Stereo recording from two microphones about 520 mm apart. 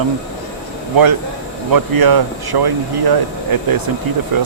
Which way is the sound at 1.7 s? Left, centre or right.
Right.